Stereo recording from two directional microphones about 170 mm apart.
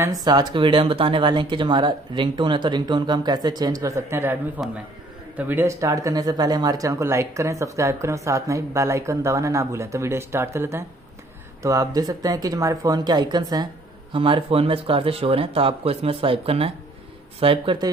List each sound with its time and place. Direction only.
0.0 s speech: 20° right (ahead or behind)